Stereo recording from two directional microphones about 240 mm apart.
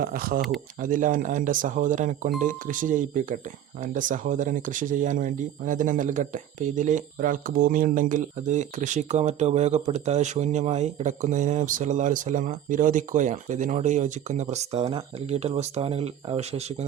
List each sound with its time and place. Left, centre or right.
0.0 s speech: right